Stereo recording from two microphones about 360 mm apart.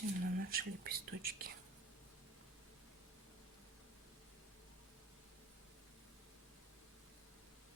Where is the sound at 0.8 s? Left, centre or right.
Right.